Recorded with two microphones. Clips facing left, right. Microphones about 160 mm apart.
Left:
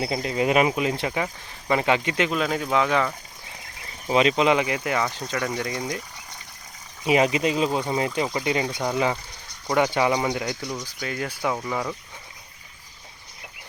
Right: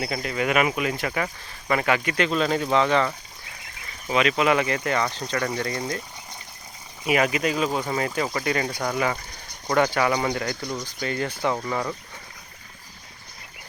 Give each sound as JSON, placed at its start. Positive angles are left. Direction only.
{"t": 0.0, "sound": "speech", "side_deg": 25}
{"t": 2.4, "sound": "speech", "side_deg": 5}
{"t": 4.1, "sound": "speech", "side_deg": 30}
{"t": 7.0, "sound": "speech", "side_deg": 20}
{"t": 9.9, "sound": "speech", "side_deg": 20}